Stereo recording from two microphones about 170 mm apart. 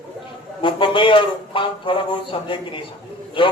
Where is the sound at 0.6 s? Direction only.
30° left (ahead or behind).